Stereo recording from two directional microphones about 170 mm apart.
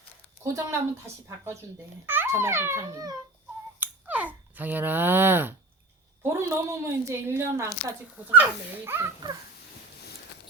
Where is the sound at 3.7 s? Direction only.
10° right (ahead or behind).